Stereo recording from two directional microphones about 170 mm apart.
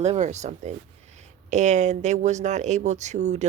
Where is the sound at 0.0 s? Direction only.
40° right (ahead or behind).